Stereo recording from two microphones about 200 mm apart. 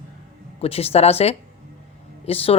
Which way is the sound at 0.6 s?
30° left (ahead or behind).